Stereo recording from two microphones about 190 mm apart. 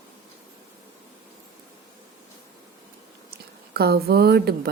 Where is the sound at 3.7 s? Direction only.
55° right (ahead or behind).